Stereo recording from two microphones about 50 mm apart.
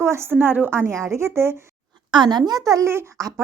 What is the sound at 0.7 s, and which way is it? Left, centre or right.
Speech, right.